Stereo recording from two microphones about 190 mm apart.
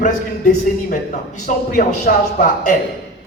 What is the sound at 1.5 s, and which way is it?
A man's voice, 45° left (ahead or behind).